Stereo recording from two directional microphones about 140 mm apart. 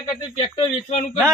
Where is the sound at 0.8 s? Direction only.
50° left (ahead or behind).